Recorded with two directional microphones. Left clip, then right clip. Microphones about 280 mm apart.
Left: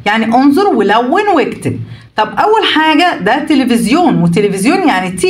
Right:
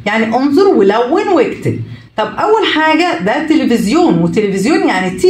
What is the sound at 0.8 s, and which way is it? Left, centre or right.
A woman's voice, left.